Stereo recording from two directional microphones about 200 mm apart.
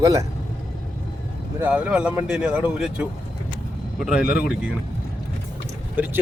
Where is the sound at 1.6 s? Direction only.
5° right (ahead or behind).